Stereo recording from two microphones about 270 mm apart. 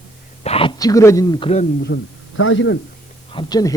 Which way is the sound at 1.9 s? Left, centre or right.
Left.